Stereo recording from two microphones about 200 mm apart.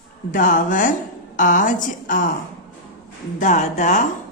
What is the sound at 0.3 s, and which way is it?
A woman's voice, 40° left (ahead or behind).